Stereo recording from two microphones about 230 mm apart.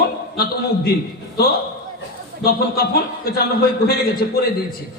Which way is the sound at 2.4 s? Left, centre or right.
Left.